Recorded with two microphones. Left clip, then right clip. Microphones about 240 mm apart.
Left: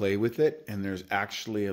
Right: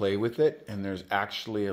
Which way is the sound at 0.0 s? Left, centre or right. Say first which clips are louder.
Even; left.